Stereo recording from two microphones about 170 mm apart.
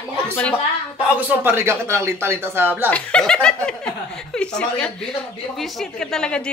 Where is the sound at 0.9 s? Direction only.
10° right (ahead or behind).